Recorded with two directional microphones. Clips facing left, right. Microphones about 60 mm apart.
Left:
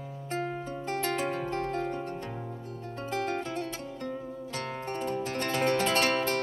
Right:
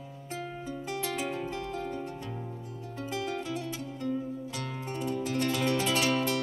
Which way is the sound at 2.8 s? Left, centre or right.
Left.